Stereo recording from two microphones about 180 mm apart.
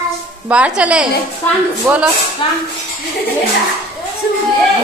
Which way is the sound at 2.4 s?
25° left (ahead or behind).